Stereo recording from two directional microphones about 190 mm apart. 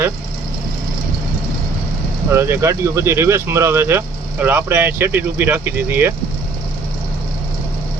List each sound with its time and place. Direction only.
2.3 s speech: 15° right (ahead or behind)